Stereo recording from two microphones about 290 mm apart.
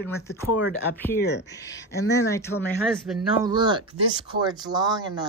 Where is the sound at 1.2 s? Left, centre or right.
Left.